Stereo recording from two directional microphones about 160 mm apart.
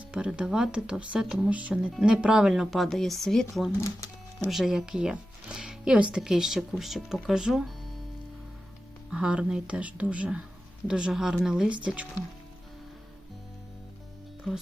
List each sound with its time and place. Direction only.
0.1 s speech: 5° right (ahead or behind)
3.8 s music: 20° left (ahead or behind)
4.4 s speech: centre (ahead or behind)
9.0 s speech: 5° right (ahead or behind)
14.5 s speech: centre (ahead or behind)